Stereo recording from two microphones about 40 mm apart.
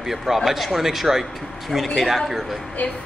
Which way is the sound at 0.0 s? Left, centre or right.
Centre.